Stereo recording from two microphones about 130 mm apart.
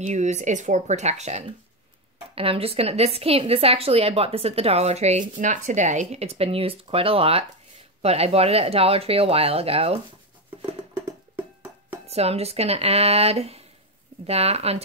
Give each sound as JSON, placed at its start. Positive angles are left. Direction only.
{"t": 0.0, "sound": "speech", "side_deg": -65}
{"t": 2.3, "sound": "a woman's voice", "side_deg": -45}
{"t": 5.4, "sound": "a woman's voice", "side_deg": -70}
{"t": 12.1, "sound": "a woman's voice", "side_deg": -50}